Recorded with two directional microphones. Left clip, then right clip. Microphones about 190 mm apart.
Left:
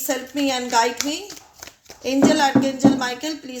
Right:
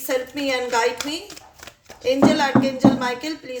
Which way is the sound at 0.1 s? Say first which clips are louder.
Right 1 dB; 35° left (ahead or behind).